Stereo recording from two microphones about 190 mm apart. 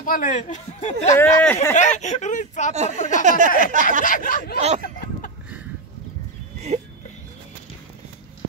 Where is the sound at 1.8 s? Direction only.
40° left (ahead or behind).